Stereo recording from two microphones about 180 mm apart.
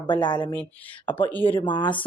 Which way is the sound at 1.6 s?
25° left (ahead or behind).